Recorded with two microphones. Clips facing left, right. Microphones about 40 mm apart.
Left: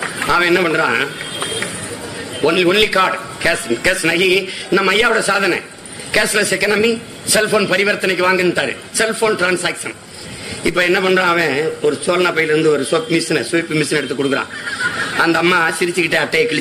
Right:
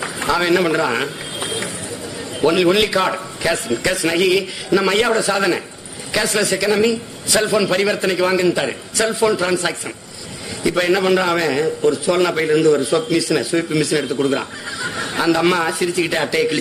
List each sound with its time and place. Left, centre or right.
0.3 s a man's voice: left
2.4 s a man's voice: left
10.6 s a man's voice: left
14.3 s a sound: left
15.2 s a man's voice: left